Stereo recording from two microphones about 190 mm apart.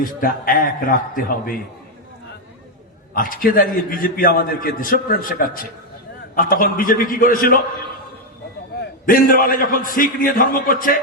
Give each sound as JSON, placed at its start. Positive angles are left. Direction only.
{"t": 0.0, "sound": "a man's voice", "side_deg": 45}
{"t": 3.2, "sound": "a man's voice", "side_deg": 45}
{"t": 8.8, "sound": "a man's voice", "side_deg": 50}